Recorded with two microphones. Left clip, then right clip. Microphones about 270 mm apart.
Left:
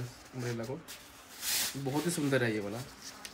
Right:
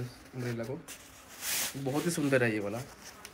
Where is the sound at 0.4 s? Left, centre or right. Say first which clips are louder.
Right 1 dB; centre.